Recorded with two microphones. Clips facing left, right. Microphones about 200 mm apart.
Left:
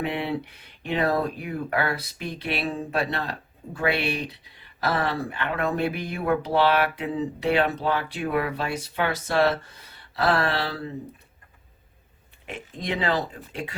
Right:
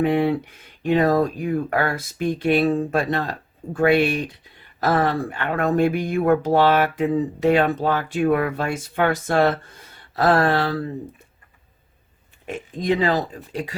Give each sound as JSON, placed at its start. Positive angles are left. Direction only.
{"t": 0.0, "sound": "speech", "side_deg": -45}
{"t": 12.5, "sound": "speech", "side_deg": -40}